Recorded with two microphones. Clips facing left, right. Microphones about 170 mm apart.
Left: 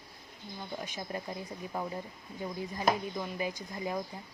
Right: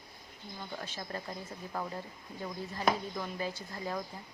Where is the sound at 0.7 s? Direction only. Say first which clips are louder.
Left 3 dB; 15° left (ahead or behind).